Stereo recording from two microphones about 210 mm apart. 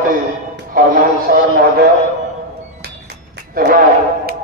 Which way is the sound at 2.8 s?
50° right (ahead or behind).